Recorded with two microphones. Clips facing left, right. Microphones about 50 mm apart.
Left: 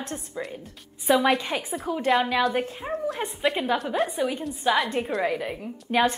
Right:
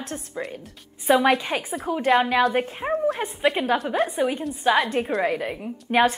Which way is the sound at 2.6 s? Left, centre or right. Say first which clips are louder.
Right 4 dB; right.